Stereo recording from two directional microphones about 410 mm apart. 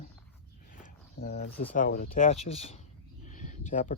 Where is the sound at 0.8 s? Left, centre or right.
Left.